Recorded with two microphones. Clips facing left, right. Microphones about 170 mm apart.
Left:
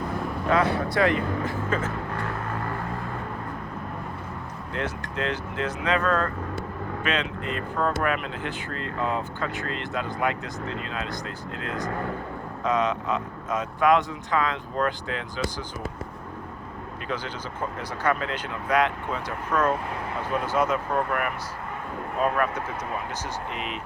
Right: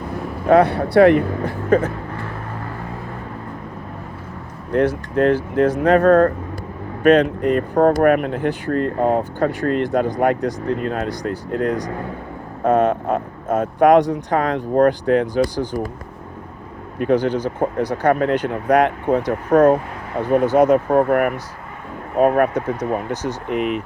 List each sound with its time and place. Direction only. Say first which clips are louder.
0.4 s speech: right 10 dB; 60° right (ahead or behind)
4.7 s speech: right 14 dB; 55° right (ahead or behind)
14.1 s speech: right 7 dB; 60° right (ahead or behind)
17.0 s speech: right 16 dB; 55° right (ahead or behind)
22.2 s speech: right 10 dB; 60° right (ahead or behind)